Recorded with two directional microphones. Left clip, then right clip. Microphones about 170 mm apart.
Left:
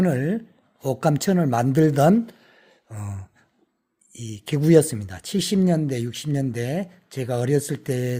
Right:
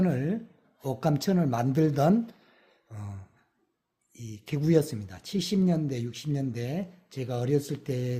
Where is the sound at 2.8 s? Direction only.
25° left (ahead or behind).